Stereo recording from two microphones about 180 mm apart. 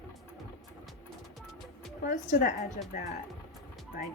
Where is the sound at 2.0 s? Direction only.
45° left (ahead or behind).